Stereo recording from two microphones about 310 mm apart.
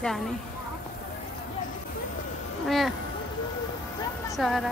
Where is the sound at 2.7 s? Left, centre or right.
Centre.